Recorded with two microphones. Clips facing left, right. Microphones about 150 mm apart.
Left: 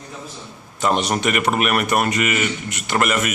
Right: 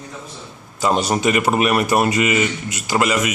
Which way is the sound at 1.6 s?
25° right (ahead or behind).